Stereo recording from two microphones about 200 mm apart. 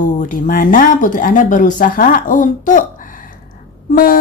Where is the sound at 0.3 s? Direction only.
40° left (ahead or behind).